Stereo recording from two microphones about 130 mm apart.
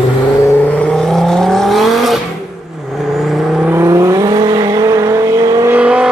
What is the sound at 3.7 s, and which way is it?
Vehicle, 20° right (ahead or behind).